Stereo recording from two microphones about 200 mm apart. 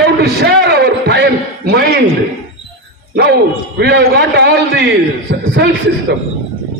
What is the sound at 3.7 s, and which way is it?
A man's voice, 55° right (ahead or behind).